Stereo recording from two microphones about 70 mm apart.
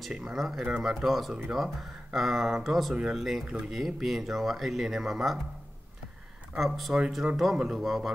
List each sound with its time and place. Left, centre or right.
0.1 s speech: centre
6.5 s speech: centre